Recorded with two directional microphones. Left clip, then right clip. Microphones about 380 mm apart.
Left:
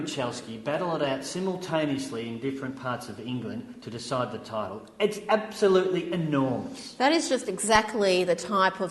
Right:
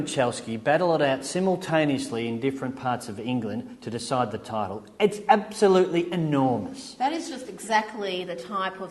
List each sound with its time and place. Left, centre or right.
0.2 s a woman's voice: right
7.0 s a woman's voice: left